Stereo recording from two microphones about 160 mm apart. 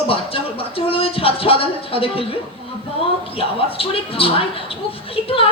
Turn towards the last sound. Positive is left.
turn(degrees=35)  # may be behind; listen again after turning